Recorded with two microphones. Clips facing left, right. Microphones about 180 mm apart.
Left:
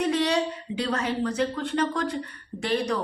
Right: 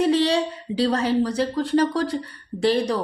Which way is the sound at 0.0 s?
30° right (ahead or behind).